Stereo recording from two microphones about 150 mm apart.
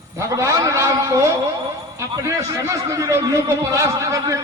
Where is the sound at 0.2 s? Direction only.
20° right (ahead or behind).